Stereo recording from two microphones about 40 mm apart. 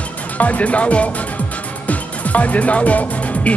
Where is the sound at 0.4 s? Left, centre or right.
Left.